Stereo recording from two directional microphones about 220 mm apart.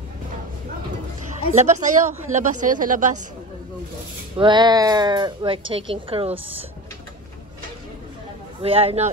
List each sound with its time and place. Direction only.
1.5 s speech: 30° right (ahead or behind)
4.4 s speech: 20° right (ahead or behind)
8.6 s speech: 25° right (ahead or behind)